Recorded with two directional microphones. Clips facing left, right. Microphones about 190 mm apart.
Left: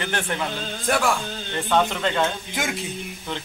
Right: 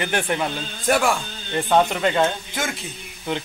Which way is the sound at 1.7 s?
10° right (ahead or behind).